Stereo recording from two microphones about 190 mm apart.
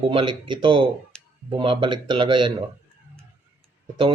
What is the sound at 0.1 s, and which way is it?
Speech, 25° right (ahead or behind).